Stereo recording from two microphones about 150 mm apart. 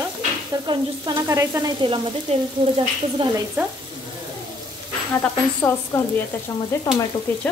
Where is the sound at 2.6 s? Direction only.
35° right (ahead or behind).